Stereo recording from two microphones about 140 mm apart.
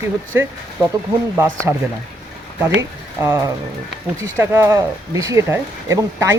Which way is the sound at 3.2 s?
20° right (ahead or behind).